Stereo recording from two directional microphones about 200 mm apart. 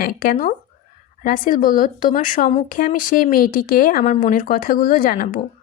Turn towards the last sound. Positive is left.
turn(degrees=45)  # may be behind; listen again after turning